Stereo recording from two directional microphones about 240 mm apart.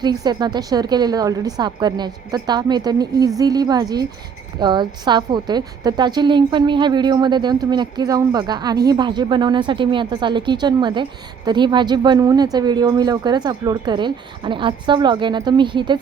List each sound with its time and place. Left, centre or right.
0.0 s a woman's voice: centre